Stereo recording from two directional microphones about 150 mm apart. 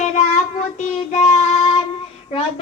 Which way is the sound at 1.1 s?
50° left (ahead or behind).